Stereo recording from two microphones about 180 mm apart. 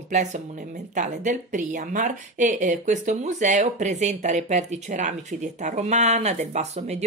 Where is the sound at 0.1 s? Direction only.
40° right (ahead or behind).